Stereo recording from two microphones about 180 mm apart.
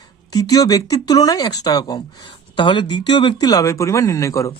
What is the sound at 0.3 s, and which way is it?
Speech, 20° left (ahead or behind).